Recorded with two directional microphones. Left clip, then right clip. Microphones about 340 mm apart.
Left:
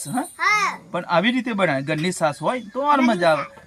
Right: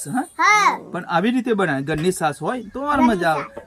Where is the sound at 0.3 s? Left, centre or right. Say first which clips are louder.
Right 5 dB; centre.